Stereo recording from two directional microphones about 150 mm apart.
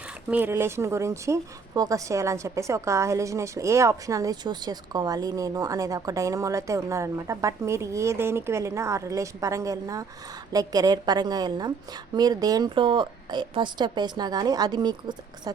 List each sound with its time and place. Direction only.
0.3 s speech: 15° right (ahead or behind)